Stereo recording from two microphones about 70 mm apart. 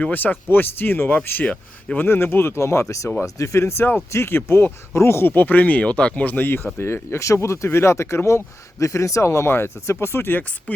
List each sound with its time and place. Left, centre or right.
0.0 s speech: left
10.7 s speech: centre